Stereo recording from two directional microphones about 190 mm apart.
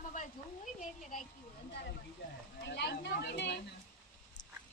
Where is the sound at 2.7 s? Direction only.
65° left (ahead or behind).